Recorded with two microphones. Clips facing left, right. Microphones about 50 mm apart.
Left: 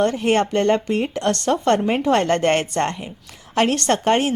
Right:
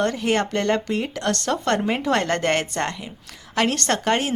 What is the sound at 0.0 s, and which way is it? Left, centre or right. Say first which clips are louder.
A woman's voice: left 3 dB; left.